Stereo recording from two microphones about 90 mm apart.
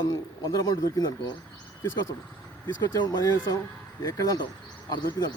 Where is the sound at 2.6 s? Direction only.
45° left (ahead or behind).